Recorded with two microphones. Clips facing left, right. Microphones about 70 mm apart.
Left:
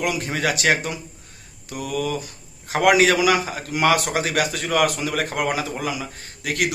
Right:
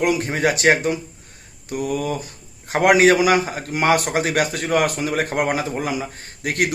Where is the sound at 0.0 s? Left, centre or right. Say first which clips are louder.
Right 4 dB; right.